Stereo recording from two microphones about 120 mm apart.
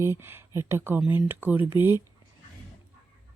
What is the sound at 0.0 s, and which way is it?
Speech, 20° right (ahead or behind).